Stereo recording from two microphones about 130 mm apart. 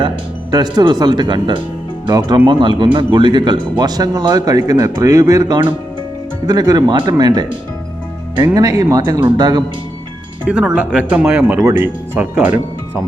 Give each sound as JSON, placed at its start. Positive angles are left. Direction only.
{"t": 0.5, "sound": "speech", "side_deg": -35}
{"t": 8.5, "sound": "speech", "side_deg": -30}
{"t": 10.4, "sound": "speech", "side_deg": -5}